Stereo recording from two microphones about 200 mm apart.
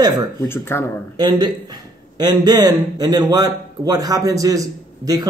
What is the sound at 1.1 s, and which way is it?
Speech, 20° right (ahead or behind).